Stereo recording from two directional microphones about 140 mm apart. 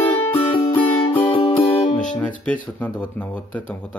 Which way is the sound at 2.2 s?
10° left (ahead or behind).